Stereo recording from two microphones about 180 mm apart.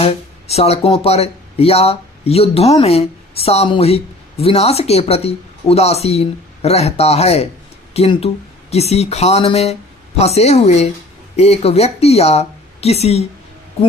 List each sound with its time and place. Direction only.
0.0 s speech: 35° left (ahead or behind)